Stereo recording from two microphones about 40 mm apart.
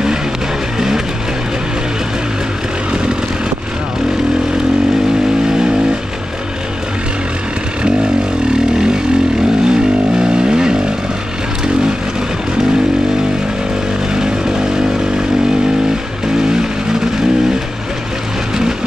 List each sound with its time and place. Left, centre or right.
0.7 s vehicle: centre
9.7 s vehicle: right
14.1 s vehicle: centre